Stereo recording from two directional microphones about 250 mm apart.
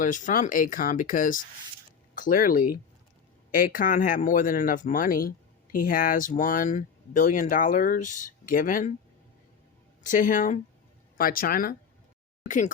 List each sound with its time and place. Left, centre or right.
0.0 s speech: left
10.0 s speech: left